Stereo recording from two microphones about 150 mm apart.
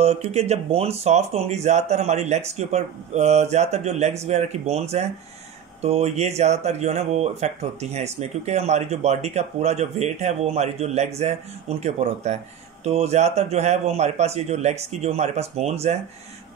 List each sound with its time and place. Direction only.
0.0 s speech: 45° right (ahead or behind)